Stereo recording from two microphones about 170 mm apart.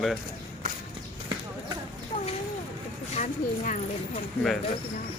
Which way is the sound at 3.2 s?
50° left (ahead or behind).